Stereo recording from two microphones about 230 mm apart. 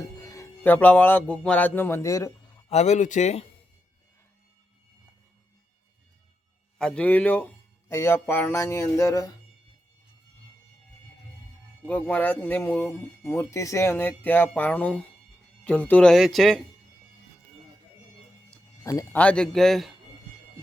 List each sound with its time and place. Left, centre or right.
0.3 s speech: centre
2.6 s speech: left
6.7 s speech: centre
11.9 s speech: centre
18.5 s speech: centre